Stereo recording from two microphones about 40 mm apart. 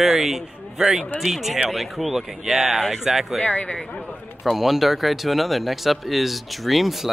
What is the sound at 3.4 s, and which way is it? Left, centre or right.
Speech, left.